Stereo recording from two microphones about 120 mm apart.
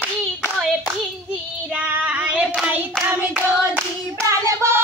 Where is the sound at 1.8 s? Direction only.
10° right (ahead or behind).